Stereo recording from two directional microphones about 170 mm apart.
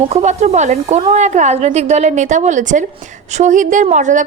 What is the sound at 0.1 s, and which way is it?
A woman's voice, 40° right (ahead or behind).